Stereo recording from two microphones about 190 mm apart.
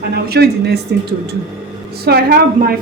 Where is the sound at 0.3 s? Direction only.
60° right (ahead or behind).